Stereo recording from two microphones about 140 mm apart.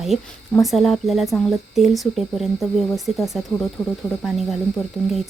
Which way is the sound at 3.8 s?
20° left (ahead or behind).